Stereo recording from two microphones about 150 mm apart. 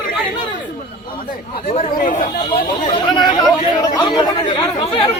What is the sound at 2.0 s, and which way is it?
Speech, 60° left (ahead or behind).